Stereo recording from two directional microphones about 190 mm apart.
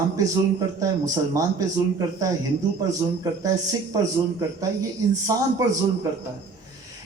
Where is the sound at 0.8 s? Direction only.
20° right (ahead or behind).